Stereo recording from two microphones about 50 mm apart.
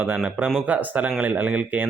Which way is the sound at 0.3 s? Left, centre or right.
Right.